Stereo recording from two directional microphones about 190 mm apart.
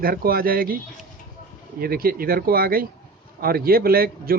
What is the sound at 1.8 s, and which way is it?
A man's voice, 50° right (ahead or behind).